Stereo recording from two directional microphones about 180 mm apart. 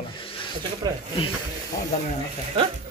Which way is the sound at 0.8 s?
20° right (ahead or behind).